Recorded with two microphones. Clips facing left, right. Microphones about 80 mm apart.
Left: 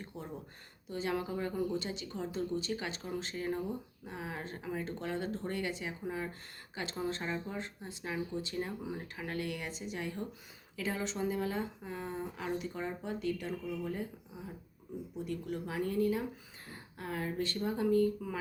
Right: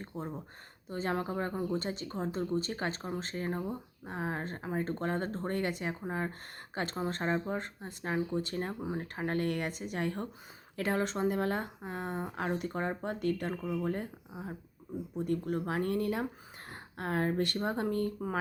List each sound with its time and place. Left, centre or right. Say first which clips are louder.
0.1 s speech: right 6 dB; right